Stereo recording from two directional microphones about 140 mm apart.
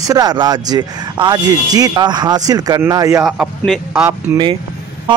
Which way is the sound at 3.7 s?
10° right (ahead or behind).